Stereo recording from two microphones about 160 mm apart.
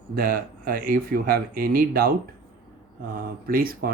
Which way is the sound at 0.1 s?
65° right (ahead or behind).